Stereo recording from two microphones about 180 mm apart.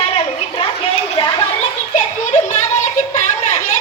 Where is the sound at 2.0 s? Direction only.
40° left (ahead or behind).